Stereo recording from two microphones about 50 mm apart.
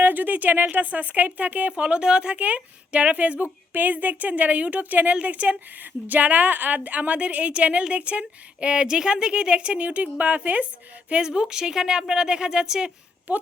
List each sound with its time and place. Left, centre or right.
0.0 s a woman's voice: right
11.1 s speech: centre